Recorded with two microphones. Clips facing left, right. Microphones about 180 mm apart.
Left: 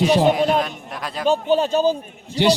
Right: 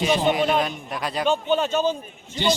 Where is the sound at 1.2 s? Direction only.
35° left (ahead or behind).